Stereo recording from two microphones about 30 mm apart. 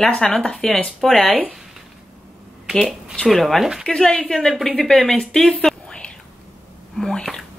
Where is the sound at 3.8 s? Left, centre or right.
Left.